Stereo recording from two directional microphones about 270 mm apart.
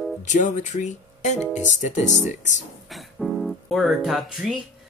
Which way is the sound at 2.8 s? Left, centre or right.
Centre.